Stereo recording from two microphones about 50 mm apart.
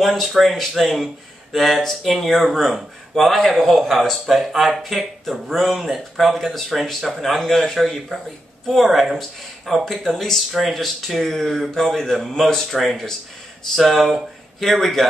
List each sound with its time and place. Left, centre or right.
0.0 s speech: centre